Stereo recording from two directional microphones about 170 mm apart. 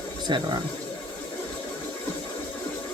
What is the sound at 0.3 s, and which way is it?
Speech, 25° right (ahead or behind).